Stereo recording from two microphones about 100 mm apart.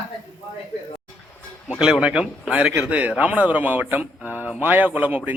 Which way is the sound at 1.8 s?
10° right (ahead or behind).